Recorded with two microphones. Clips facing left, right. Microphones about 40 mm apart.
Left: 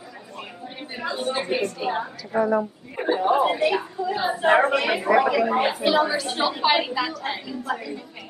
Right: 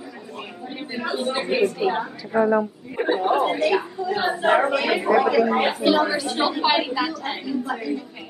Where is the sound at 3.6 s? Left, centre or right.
Centre.